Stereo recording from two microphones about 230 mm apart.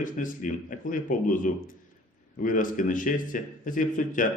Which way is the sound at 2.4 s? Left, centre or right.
Left.